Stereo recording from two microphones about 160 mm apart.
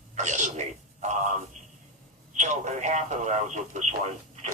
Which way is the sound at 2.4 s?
50° right (ahead or behind).